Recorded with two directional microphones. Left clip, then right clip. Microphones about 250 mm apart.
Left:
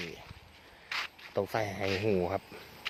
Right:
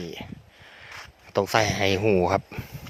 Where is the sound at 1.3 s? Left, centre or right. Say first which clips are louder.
Right 11 dB; right.